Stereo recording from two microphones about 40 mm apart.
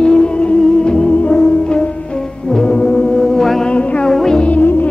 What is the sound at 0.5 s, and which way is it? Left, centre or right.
Music, centre.